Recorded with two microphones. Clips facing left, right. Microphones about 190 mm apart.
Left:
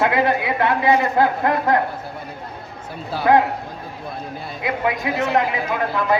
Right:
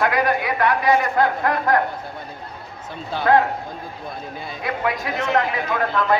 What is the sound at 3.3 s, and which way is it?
Speech, 15° left (ahead or behind).